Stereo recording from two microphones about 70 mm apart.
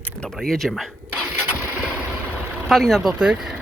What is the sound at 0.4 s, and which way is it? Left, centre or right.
Speech, centre.